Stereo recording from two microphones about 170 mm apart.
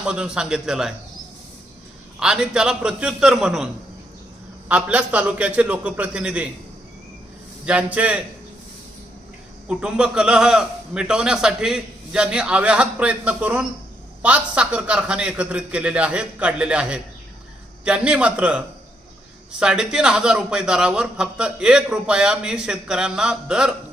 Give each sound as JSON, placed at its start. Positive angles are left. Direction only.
{"t": 0.0, "sound": "a man's voice", "side_deg": -5}
{"t": 2.1, "sound": "a man's voice", "side_deg": -5}
{"t": 4.7, "sound": "a man's voice", "side_deg": -10}
{"t": 7.6, "sound": "a man's voice", "side_deg": -5}
{"t": 9.6, "sound": "a man's voice", "side_deg": -5}